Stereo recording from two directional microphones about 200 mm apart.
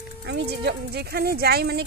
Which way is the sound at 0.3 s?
60° right (ahead or behind).